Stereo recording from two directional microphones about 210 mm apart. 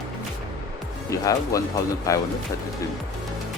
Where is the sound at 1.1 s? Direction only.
15° left (ahead or behind).